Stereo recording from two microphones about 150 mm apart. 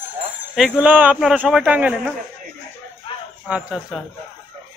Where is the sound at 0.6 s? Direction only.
5° right (ahead or behind).